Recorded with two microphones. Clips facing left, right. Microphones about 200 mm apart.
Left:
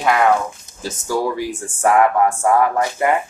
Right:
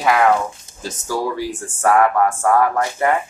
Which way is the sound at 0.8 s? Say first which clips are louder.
Left 2 dB; 15° left (ahead or behind).